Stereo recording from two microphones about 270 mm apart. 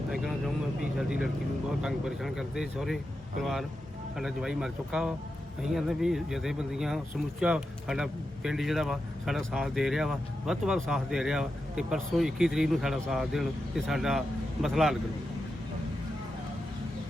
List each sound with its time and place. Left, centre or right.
0.1 s speech: centre